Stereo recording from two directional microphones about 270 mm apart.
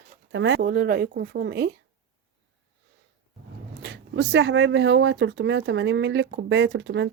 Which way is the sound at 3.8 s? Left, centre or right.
Right.